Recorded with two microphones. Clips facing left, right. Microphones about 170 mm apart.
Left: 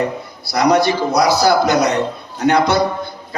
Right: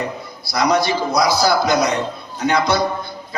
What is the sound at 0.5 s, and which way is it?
Speech, 60° left (ahead or behind).